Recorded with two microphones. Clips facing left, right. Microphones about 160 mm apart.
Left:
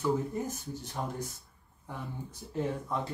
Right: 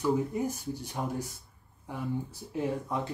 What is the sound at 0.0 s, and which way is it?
Speech, 15° right (ahead or behind).